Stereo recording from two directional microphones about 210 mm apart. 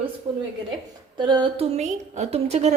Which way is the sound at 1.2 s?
20° right (ahead or behind).